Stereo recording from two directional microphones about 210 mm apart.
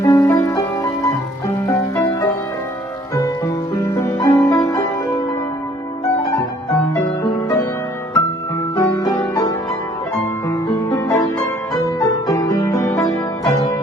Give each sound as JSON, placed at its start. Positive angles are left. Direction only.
{"t": 0.0, "sound": "music", "side_deg": 15}
{"t": 1.6, "sound": "music", "side_deg": 10}
{"t": 6.7, "sound": "music", "side_deg": 15}
{"t": 8.7, "sound": "music", "side_deg": 20}
{"t": 10.9, "sound": "music", "side_deg": 15}